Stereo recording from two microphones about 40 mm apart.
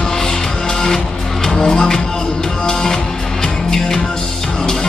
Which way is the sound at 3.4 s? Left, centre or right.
Centre.